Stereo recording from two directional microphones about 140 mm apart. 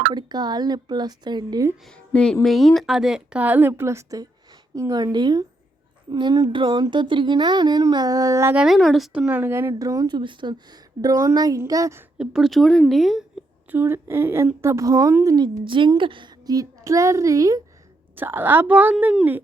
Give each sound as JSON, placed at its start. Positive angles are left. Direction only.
{"t": 0.1, "sound": "speech", "side_deg": -30}
{"t": 2.1, "sound": "a woman's voice", "side_deg": 5}
{"t": 8.5, "sound": "speech", "side_deg": 0}
{"t": 9.2, "sound": "a woman's voice", "side_deg": -15}
{"t": 12.1, "sound": "speech", "side_deg": -5}
{"t": 13.7, "sound": "a woman's voice", "side_deg": -15}
{"t": 15.6, "sound": "a woman's voice", "side_deg": -35}